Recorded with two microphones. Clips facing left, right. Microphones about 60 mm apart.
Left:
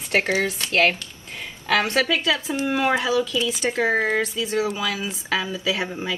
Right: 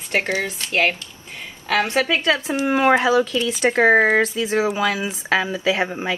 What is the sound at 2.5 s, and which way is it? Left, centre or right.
Speech, right.